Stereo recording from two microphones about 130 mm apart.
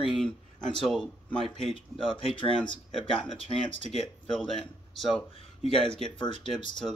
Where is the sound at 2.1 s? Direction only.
40° left (ahead or behind).